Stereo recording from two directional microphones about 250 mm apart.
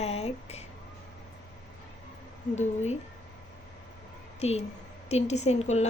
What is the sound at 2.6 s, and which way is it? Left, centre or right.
Speech, left.